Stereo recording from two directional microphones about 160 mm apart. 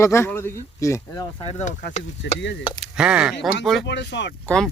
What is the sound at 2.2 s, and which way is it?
Speech, 90° left.